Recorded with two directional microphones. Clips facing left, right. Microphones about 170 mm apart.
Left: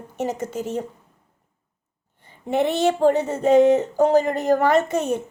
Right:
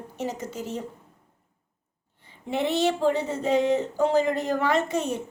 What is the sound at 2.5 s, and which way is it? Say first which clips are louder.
A woman's voice: left 4 dB; 50° left (ahead or behind).